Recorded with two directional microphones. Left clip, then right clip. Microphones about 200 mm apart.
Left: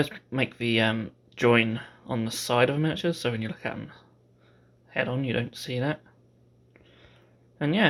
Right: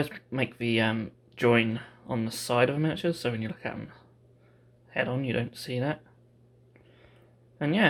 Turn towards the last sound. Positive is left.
turn(degrees=5)  # may be behind; listen again after turning